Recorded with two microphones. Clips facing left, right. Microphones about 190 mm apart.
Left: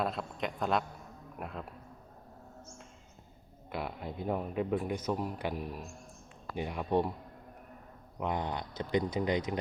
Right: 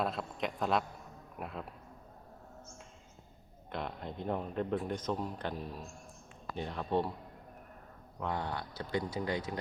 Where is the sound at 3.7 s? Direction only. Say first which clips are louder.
Left 2 dB; 5° left (ahead or behind).